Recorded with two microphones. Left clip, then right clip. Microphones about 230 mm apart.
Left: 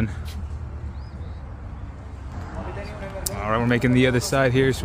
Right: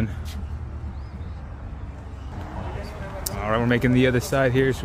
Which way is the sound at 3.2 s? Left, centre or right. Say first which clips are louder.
Even; centre.